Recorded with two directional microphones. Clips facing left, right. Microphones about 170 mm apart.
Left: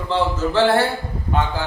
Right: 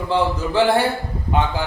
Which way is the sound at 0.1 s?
15° right (ahead or behind).